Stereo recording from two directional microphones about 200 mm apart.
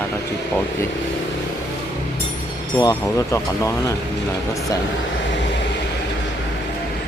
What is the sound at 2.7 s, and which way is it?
Speech, 10° left (ahead or behind).